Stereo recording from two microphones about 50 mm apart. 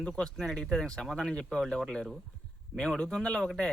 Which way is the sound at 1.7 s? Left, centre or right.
Centre.